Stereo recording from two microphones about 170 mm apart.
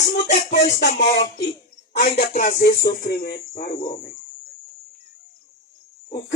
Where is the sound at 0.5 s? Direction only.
90° left.